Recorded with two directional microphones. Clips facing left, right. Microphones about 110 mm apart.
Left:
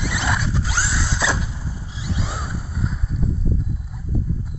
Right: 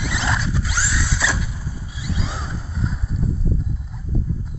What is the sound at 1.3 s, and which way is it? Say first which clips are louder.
Vehicle: left 1 dB; 30° left (ahead or behind).